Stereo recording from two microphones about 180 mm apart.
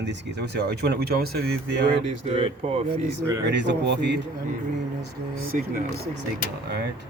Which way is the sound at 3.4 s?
75° right (ahead or behind).